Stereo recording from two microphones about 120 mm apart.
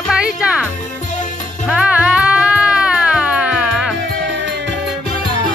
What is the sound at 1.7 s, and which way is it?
Music, 10° right (ahead or behind).